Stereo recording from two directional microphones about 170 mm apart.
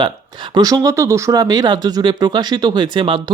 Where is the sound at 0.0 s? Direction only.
25° right (ahead or behind).